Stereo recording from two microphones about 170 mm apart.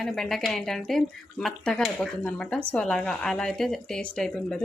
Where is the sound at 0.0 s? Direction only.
Centre (ahead or behind).